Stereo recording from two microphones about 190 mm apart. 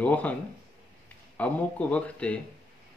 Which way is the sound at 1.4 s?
5° left (ahead or behind).